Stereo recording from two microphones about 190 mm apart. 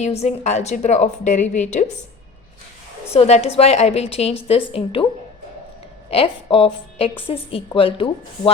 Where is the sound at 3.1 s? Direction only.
35° left (ahead or behind).